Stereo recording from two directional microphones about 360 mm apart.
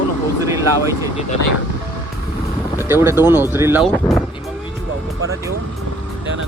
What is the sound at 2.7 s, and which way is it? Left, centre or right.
Speech, centre.